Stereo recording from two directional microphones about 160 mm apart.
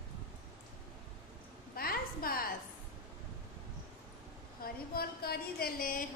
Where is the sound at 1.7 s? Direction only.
70° left (ahead or behind).